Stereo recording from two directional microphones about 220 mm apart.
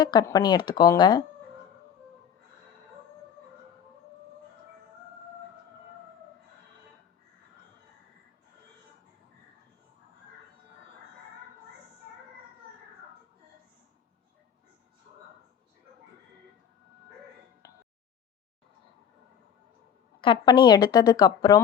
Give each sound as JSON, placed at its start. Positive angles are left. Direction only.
{"t": 0.0, "sound": "a woman's voice", "side_deg": 20}
{"t": 20.2, "sound": "a woman's voice", "side_deg": 20}